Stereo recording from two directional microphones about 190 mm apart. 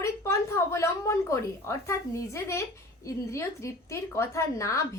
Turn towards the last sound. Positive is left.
turn(degrees=15)  # may be behind; listen again after turning